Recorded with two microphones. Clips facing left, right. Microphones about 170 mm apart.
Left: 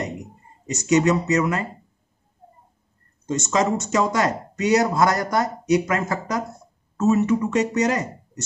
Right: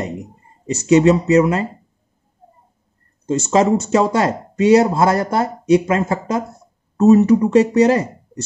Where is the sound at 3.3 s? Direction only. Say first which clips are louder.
Right 6 dB; 30° right (ahead or behind).